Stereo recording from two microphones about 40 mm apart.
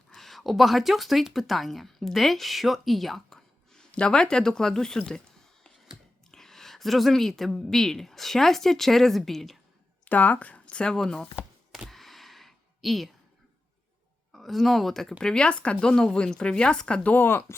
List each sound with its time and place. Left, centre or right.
0.2 s speech: centre
3.9 s speech: left
6.3 s speech: centre
10.1 s speech: left
10.9 s speech: centre
11.9 s a sound: centre
14.3 s speech: centre
15.2 s speech: centre
15.4 s speech: left